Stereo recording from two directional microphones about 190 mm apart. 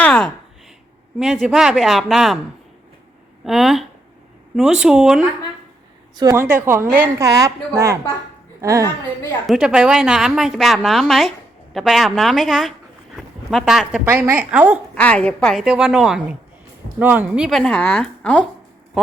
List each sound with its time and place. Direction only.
0.0 s a sound: 5° left (ahead or behind)
1.2 s a woman's voice: 5° right (ahead or behind)
3.4 s a woman's voice: centre (ahead or behind)
6.1 s a woman's voice: 15° right (ahead or behind)
9.5 s a woman's voice: 5° right (ahead or behind)
14.9 s a woman's voice: 5° left (ahead or behind)